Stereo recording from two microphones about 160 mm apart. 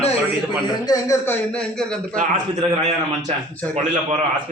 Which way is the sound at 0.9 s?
20° left (ahead or behind).